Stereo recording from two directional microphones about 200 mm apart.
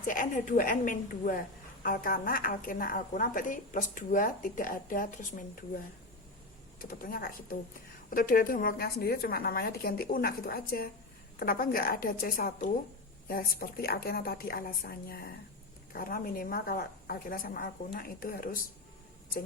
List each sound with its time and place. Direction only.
0.1 s a woman's voice: 40° left (ahead or behind)
6.7 s a woman's voice: 45° left (ahead or behind)